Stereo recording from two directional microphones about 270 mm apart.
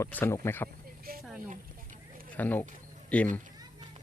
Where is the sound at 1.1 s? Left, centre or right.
Right.